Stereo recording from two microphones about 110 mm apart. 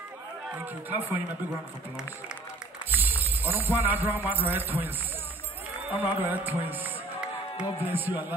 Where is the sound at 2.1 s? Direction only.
15° right (ahead or behind).